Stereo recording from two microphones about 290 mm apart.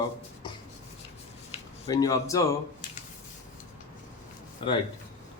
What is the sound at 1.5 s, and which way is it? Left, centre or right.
Speech, centre.